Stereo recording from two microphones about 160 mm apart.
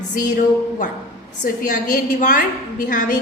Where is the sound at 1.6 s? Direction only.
55° left (ahead or behind).